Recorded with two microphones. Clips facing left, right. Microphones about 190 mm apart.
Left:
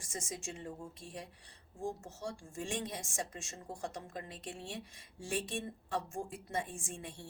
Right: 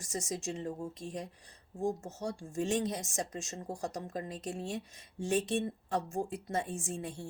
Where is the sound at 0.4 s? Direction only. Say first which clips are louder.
Right 7 dB; 40° right (ahead or behind).